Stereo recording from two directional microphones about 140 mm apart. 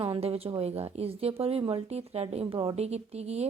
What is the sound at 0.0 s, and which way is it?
Speech, 45° right (ahead or behind).